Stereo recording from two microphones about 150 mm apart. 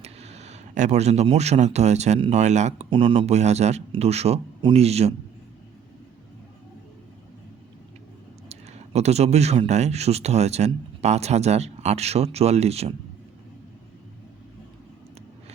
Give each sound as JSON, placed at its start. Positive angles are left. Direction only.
{"t": 0.0, "sound": "speech", "side_deg": -45}
{"t": 2.9, "sound": "speech", "side_deg": -35}
{"t": 3.3, "sound": "speech", "side_deg": -50}
{"t": 8.4, "sound": "speech", "side_deg": -45}